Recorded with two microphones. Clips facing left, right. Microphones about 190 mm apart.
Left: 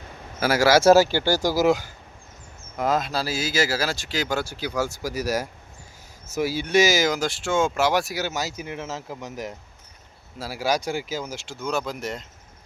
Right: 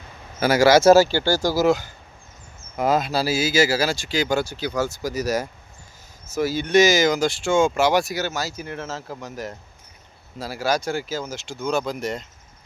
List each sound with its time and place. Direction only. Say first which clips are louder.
0.3 s speech: right 3 dB; 5° left (ahead or behind)
2.7 s speech: right 3 dB; 5° right (ahead or behind)
8.3 s speech: right 1 dB; 20° left (ahead or behind); by 12.2 s centre (ahead or behind)